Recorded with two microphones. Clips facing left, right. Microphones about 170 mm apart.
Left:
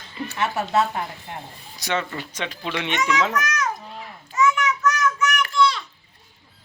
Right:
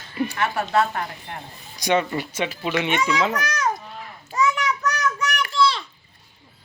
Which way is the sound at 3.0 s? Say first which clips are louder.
Even; 35° right (ahead or behind).